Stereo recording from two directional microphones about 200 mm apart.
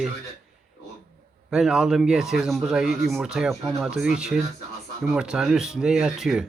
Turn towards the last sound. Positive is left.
turn(degrees=-5)  # may be behind; listen again after turning